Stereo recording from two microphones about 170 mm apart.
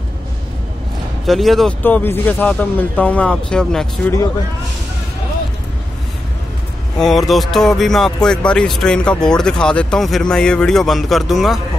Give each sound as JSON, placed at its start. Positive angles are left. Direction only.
{"t": 1.2, "sound": "speech", "side_deg": 0}
{"t": 7.0, "sound": "speech", "side_deg": 0}